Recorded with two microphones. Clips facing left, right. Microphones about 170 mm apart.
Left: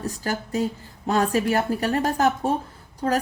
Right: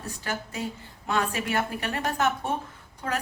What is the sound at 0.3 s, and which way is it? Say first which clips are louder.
A woman's voice: left 7 dB; 40° left (ahead or behind).